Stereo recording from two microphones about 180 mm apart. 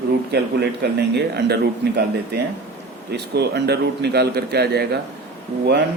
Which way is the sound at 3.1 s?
65° right (ahead or behind).